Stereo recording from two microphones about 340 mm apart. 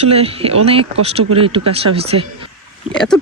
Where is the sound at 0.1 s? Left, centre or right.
Centre.